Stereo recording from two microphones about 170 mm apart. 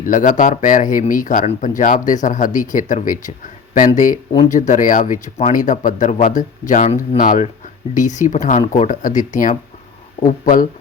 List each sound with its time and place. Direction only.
0.0 s speech: 50° left (ahead or behind)